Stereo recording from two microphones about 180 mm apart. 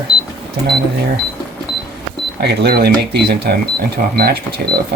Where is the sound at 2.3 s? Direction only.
60° right (ahead or behind).